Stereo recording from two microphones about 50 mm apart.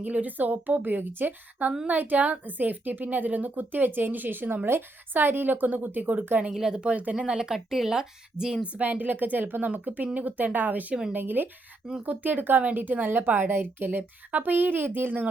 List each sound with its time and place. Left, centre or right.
0.0 s a woman's voice: right
6.5 s speech: centre
6.9 s speech: right
7.3 s speech: centre
8.8 s a woman's voice: right